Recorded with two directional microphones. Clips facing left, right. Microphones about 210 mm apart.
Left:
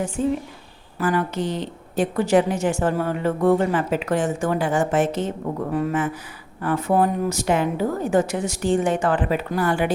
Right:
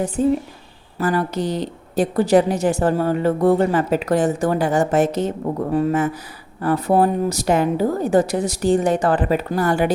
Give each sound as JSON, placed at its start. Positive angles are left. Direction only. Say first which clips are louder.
{"t": 0.2, "sound": "a woman's voice", "louder": "right 6 dB", "side_deg": -40}